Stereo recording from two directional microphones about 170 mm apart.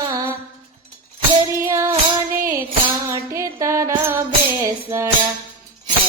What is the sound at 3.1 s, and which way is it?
Music, 20° right (ahead or behind).